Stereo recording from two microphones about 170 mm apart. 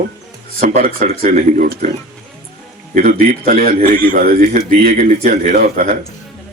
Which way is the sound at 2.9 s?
55° right (ahead or behind).